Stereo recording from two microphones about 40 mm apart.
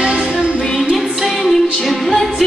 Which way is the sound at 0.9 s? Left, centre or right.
Centre.